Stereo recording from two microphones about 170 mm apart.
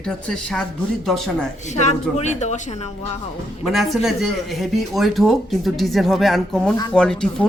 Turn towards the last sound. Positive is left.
turn(degrees=5)  # may be behind; listen again after turning